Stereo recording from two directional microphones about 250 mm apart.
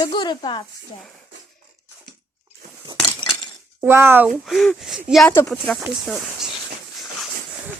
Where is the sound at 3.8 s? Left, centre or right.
Centre.